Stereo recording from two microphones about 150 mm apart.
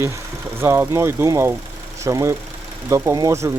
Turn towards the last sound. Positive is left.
turn(degrees=-20)  # may be behind; listen again after turning